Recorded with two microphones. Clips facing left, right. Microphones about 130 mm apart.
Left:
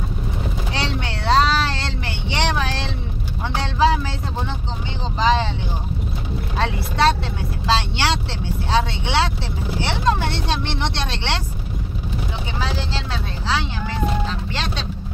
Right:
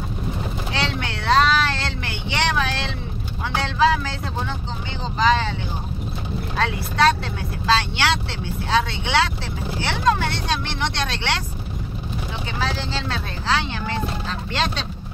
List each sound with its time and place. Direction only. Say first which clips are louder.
0.7 s vehicle: right 1 dB; 30° left (ahead or behind)
5.2 s vehicle: even; 25° left (ahead or behind)
6.6 s vehicle: even; 25° left (ahead or behind)
8.6 s speech: even; 30° left (ahead or behind)
9.8 s vehicle: even; 30° left (ahead or behind)
12.5 s speech: right 1 dB; 15° left (ahead or behind)
14.5 s speech: right 3 dB; centre (ahead or behind)